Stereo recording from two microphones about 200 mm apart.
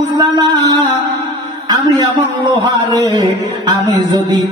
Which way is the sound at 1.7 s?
20° right (ahead or behind).